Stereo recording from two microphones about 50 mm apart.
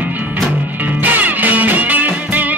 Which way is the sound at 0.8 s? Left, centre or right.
Right.